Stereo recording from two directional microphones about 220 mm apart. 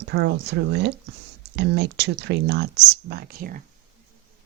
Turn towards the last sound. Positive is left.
turn(degrees=-40)  # may be behind; listen again after turning